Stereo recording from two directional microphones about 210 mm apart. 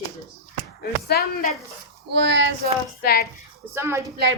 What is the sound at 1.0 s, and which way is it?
Speech, 50° left (ahead or behind).